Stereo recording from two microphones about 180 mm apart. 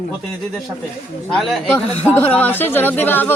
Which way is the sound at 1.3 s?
Centre (ahead or behind).